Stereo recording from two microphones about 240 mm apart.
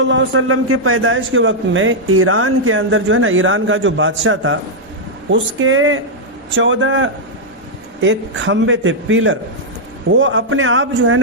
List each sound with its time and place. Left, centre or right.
0.0 s a man's voice: right